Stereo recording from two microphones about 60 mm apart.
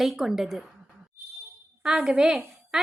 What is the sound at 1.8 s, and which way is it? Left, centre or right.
Speech, centre.